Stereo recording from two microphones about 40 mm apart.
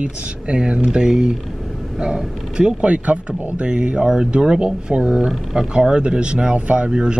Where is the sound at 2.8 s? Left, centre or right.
Right.